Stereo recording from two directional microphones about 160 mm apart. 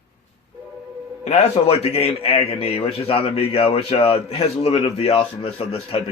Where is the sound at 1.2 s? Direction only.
40° left (ahead or behind).